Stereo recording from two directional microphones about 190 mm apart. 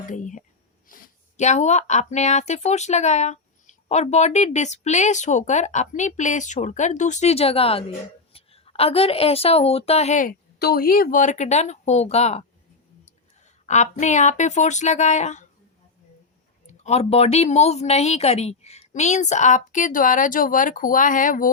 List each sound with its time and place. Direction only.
0.0 s a woman's voice: 40° left (ahead or behind)
13.7 s speech: 40° left (ahead or behind)
16.6 s speech: 35° left (ahead or behind)